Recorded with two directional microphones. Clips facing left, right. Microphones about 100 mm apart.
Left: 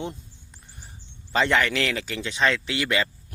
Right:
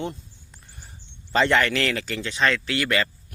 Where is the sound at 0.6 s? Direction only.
Centre (ahead or behind).